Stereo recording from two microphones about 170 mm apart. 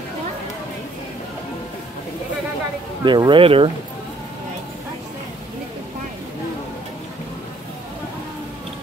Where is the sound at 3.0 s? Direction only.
25° right (ahead or behind).